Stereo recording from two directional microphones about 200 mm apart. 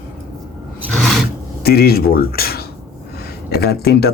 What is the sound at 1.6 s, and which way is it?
Speech, 50° left (ahead or behind).